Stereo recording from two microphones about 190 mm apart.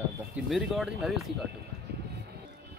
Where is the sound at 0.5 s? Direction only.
Centre (ahead or behind).